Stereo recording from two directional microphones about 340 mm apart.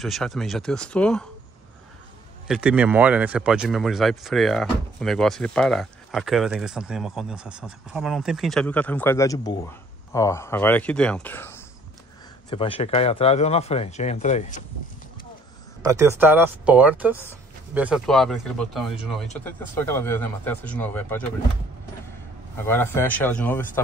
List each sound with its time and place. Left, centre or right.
0.0 s speech: centre
2.4 s speech: centre; by 14.6 s left
15.8 s speech: centre
22.7 s speech: centre